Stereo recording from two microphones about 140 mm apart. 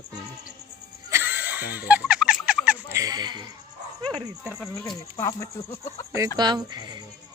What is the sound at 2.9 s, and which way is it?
Speech, 25° right (ahead or behind).